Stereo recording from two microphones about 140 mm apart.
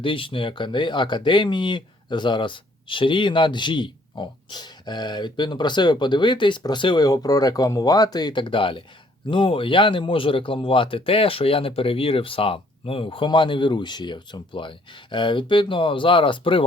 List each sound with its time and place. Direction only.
0.0 s speech: 40° left (ahead or behind)